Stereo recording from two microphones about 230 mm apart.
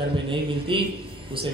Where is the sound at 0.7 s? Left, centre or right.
Right.